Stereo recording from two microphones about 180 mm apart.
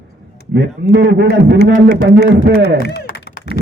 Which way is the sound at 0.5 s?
65° right (ahead or behind).